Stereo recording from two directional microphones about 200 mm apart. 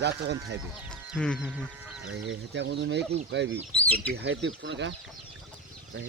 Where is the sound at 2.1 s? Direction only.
65° right (ahead or behind).